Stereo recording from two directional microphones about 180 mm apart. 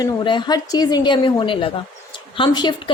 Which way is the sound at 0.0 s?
25° left (ahead or behind).